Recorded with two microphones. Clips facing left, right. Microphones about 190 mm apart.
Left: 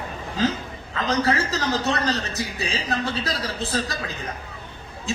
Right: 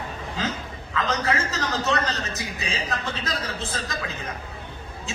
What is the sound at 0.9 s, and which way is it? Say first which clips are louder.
A man's voice: left 3 dB; 35° left (ahead or behind).